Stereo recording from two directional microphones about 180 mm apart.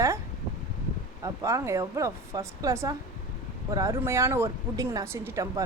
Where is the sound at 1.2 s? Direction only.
15° right (ahead or behind).